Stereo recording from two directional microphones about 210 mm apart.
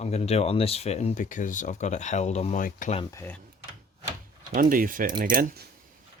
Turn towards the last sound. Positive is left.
turn(degrees=-45)  # may be behind; listen again after turning